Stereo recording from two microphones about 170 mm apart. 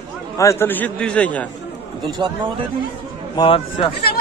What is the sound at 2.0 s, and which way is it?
Speech, 25° right (ahead or behind).